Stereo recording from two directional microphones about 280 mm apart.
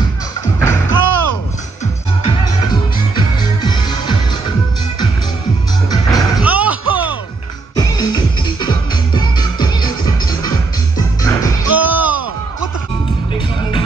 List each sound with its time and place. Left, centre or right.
0.6 s music: centre
2.2 s music: centre
5.9 s music: centre
6.4 s music: centre
7.7 s music: centre
11.7 s a sound: centre
13.3 s music: centre